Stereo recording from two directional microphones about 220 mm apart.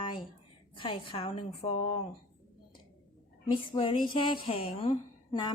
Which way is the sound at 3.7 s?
25° left (ahead or behind).